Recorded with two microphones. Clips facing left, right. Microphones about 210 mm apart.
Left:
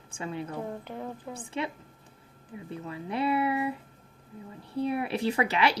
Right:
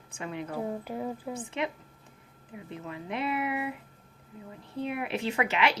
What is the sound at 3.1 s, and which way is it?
Speech, 35° left (ahead or behind).